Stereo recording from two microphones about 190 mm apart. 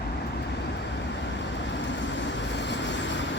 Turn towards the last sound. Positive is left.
turn(degrees=70)  # may be behind; listen again after turning